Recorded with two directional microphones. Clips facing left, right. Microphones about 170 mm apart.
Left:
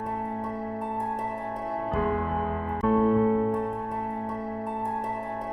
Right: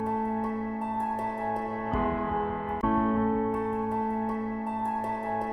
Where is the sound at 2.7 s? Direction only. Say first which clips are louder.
Left 4 dB; centre (ahead or behind).